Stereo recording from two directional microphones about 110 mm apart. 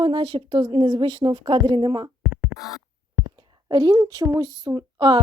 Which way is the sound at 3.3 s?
45° right (ahead or behind).